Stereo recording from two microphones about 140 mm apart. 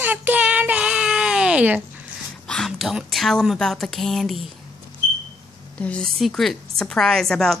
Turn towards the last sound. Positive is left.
turn(degrees=5)  # may be behind; listen again after turning